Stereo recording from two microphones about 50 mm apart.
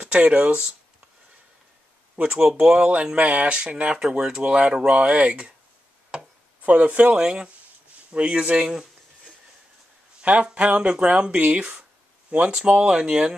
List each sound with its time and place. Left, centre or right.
0.1 s speech: right
2.3 s speech: centre
6.6 s speech: right
7.2 s speech: centre
10.2 s speech: right